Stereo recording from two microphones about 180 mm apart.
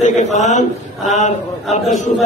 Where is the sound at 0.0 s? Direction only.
40° left (ahead or behind).